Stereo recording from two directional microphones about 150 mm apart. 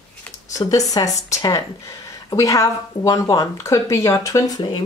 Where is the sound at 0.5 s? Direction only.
25° left (ahead or behind).